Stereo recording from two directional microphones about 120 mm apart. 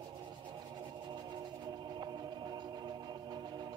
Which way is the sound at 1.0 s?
40° right (ahead or behind).